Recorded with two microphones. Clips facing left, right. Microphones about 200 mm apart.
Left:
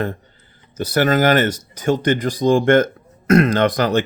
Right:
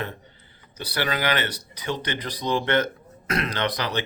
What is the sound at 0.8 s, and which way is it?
Speech, 45° left (ahead or behind).